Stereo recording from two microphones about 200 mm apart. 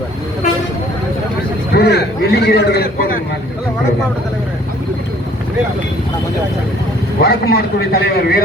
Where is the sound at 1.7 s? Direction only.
55° left (ahead or behind).